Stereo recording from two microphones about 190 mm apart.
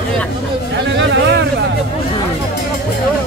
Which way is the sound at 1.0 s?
65° right (ahead or behind).